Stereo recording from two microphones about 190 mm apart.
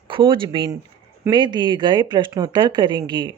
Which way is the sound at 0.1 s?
25° right (ahead or behind).